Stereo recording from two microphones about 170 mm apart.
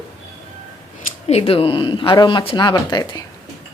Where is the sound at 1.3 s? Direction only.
35° left (ahead or behind).